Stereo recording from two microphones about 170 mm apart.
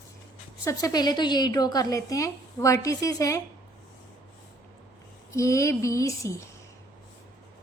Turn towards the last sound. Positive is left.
turn(degrees=20)  # may be behind; listen again after turning